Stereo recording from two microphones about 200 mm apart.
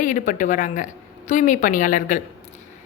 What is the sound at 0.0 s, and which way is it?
A woman's voice, 40° left (ahead or behind).